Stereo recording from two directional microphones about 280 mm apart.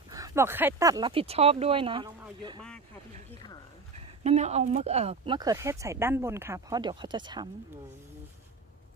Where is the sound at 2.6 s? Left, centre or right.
Centre.